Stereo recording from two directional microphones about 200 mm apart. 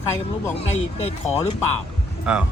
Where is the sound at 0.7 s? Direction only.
35° left (ahead or behind).